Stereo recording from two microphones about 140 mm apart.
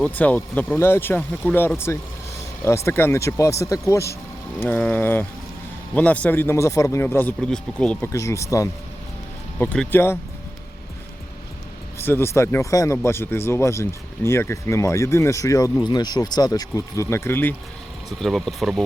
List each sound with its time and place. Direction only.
0.0 s speech: 10° left (ahead or behind)
8.1 s speech: 20° left (ahead or behind)
9.6 s speech: 10° left (ahead or behind)
11.9 s speech: 15° left (ahead or behind)
18.2 s speech: centre (ahead or behind)